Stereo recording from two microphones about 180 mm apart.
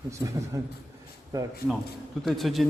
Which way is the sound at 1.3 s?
20° right (ahead or behind).